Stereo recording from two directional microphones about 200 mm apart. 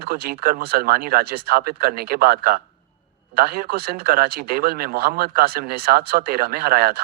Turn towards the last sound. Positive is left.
turn(degrees=-50)  # may be behind; listen again after turning